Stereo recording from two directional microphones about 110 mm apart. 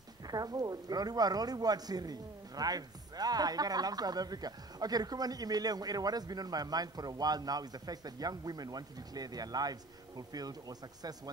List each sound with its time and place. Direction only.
0.3 s speech: 35° right (ahead or behind)